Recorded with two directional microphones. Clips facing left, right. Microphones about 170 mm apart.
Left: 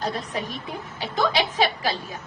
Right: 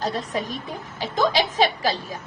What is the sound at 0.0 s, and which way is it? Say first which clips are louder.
A woman's voice: right 2 dB; 40° right (ahead or behind).